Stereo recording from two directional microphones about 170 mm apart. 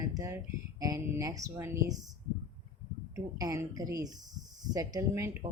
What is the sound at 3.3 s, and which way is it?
Speech, 20° right (ahead or behind).